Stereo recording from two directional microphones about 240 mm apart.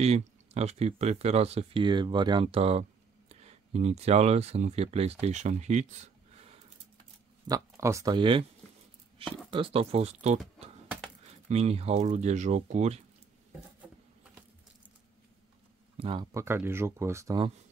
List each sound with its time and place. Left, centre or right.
0.0 s speech: right
7.4 s speech: centre
9.5 s speech: right
11.4 s speech: right
16.0 s speech: centre